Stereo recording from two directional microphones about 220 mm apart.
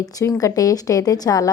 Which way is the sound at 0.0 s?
15° left (ahead or behind).